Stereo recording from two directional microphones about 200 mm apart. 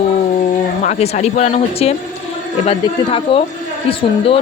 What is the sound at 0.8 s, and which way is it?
Speech, 35° left (ahead or behind).